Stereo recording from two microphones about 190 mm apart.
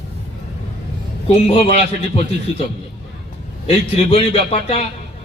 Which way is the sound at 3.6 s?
30° left (ahead or behind).